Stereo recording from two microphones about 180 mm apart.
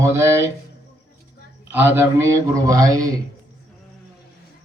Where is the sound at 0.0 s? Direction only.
15° right (ahead or behind).